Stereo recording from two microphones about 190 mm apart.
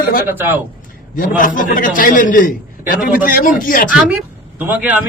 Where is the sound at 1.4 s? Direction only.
45° left (ahead or behind).